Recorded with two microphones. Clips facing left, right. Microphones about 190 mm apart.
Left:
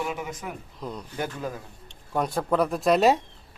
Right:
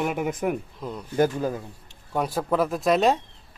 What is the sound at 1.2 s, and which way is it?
Speech, 30° right (ahead or behind).